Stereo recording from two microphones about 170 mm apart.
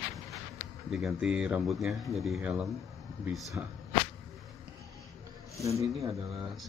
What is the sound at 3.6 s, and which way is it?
Speech, 15° right (ahead or behind).